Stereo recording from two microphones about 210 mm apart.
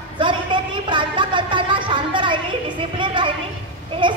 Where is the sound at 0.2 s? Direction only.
20° right (ahead or behind).